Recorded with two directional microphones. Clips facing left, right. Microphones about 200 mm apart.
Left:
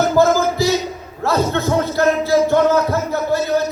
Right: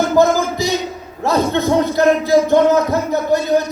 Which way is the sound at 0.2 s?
15° right (ahead or behind).